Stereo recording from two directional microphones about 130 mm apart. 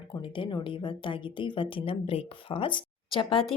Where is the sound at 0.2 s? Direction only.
35° left (ahead or behind).